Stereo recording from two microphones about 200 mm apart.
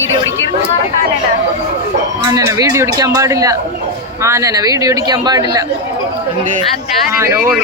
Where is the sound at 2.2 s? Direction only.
15° right (ahead or behind).